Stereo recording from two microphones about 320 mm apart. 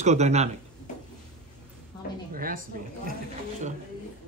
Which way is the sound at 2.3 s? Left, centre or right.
Right.